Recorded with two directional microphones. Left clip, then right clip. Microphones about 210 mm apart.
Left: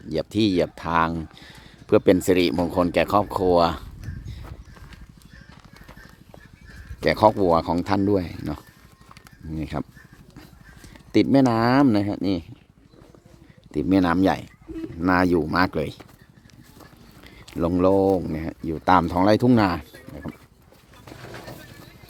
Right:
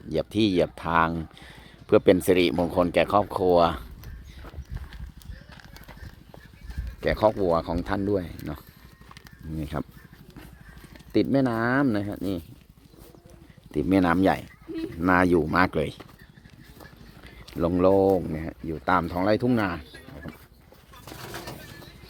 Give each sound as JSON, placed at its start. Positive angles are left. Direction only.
{"t": 0.1, "sound": "speech", "side_deg": 10}
{"t": 7.0, "sound": "speech", "side_deg": 25}
{"t": 11.1, "sound": "speech", "side_deg": 25}
{"t": 13.7, "sound": "speech", "side_deg": 5}
{"t": 17.2, "sound": "speech", "side_deg": 15}
{"t": 21.2, "sound": "bird", "side_deg": -50}